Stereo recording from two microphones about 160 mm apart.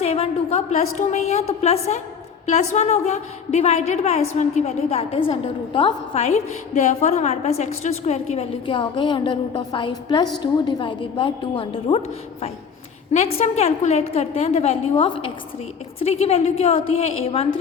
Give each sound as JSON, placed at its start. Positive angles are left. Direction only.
{"t": 0.0, "sound": "a woman's voice", "side_deg": 40}
{"t": 13.1, "sound": "a woman's voice", "side_deg": 40}